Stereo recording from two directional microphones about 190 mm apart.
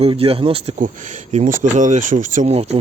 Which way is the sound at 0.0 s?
30° right (ahead or behind).